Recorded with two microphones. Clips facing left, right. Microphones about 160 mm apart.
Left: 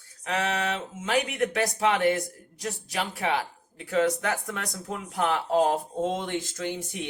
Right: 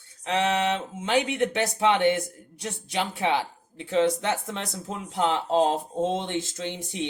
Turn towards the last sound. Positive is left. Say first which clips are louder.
# even
turn(degrees=-20)  # may be behind; listen again after turning